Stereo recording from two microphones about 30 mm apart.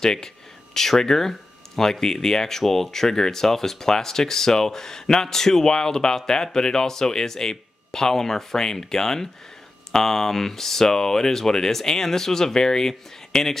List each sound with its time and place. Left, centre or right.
0.0 s speech: left